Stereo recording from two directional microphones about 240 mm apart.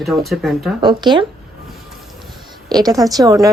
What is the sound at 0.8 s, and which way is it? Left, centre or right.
Speech, centre.